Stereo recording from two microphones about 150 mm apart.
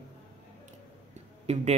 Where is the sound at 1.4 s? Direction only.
50° right (ahead or behind).